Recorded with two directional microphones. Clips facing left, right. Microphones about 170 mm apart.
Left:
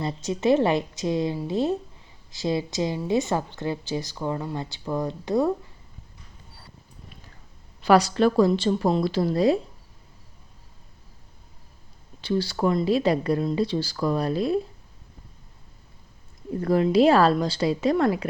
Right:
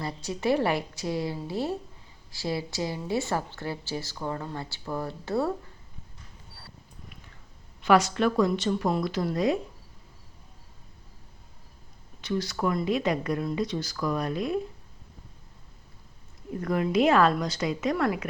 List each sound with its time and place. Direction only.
0.0 s a woman's voice: 20° left (ahead or behind)
7.8 s speech: 35° left (ahead or behind)
12.2 s speech: 30° left (ahead or behind)
16.6 s speech: 30° left (ahead or behind)